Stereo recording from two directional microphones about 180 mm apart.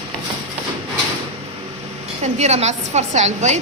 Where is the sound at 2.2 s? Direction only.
40° right (ahead or behind).